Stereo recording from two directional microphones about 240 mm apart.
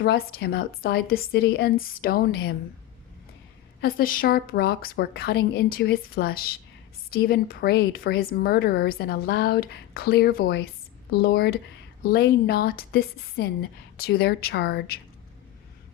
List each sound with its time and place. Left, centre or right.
0.0 s a woman's voice: left
3.8 s a woman's voice: left